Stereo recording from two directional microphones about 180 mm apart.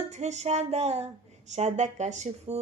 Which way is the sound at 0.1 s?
40° right (ahead or behind).